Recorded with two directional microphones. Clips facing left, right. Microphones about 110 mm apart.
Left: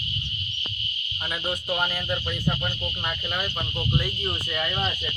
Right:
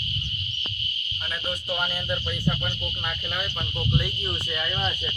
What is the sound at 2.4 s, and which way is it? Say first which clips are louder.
Speech: even; 15° left (ahead or behind).